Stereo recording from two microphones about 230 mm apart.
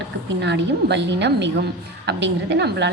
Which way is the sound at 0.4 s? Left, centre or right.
Right.